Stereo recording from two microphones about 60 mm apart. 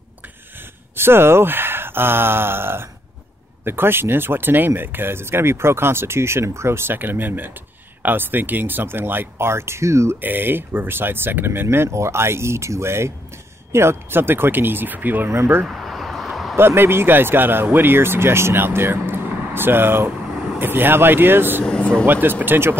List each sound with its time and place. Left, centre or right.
0.9 s speech: right
10.2 s speech: right
15.3 s speech: right
15.6 s a sound: centre
16.5 s speech: right
21.6 s a sound: centre
22.0 s speech: right